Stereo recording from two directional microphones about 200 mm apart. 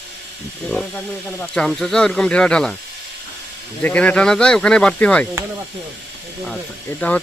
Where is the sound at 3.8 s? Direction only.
5° left (ahead or behind).